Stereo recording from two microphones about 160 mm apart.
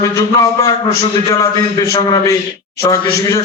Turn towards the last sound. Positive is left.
turn(degrees=20)  # may be behind; listen again after turning